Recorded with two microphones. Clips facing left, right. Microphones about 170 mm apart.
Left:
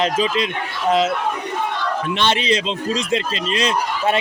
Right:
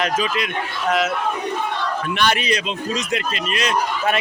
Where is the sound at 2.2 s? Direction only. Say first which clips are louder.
Left 1 dB; 25° left (ahead or behind).